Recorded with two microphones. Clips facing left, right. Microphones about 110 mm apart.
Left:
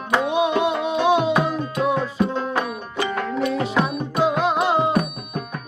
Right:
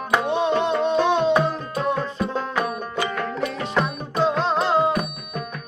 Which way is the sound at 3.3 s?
5° left (ahead or behind).